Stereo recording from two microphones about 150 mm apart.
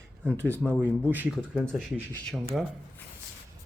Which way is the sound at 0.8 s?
10° right (ahead or behind).